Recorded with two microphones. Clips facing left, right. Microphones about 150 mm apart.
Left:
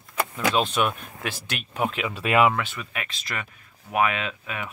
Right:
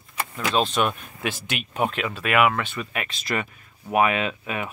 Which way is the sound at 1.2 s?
5° right (ahead or behind).